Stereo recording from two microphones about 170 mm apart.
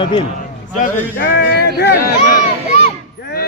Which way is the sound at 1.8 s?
70° left (ahead or behind).